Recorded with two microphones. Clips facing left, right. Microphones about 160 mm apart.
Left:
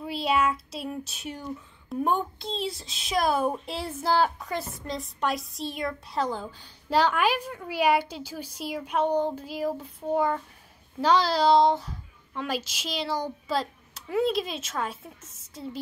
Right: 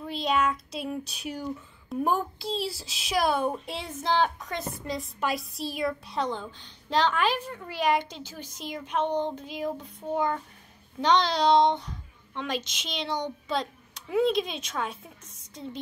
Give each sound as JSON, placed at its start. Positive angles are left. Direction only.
{"t": 0.0, "sound": "a woman's voice", "side_deg": 5}